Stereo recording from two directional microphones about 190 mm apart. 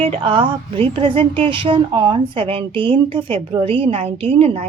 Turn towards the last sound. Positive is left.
turn(degrees=-30)  # may be behind; listen again after turning